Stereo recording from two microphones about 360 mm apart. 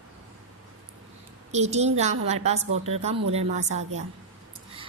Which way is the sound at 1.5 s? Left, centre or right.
Centre.